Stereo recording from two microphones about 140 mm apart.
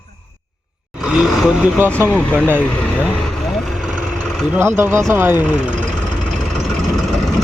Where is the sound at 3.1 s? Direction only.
5° left (ahead or behind).